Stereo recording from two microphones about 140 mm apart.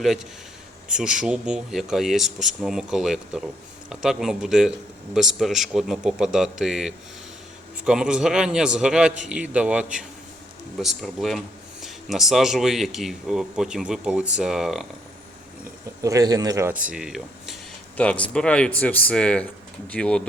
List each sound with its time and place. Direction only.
0.9 s a man's voice: 5° right (ahead or behind)
16.0 s speech: 25° right (ahead or behind)
16.8 s speech: 5° right (ahead or behind)
17.9 s speech: 10° left (ahead or behind)